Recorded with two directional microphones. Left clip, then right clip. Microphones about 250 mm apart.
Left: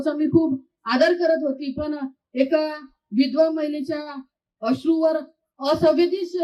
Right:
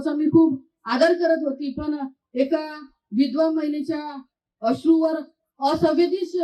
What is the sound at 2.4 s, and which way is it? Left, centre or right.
Speech, left.